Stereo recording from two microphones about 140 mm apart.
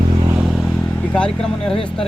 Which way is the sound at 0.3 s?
5° right (ahead or behind).